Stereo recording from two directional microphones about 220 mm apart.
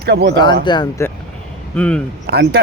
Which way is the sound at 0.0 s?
45° right (ahead or behind).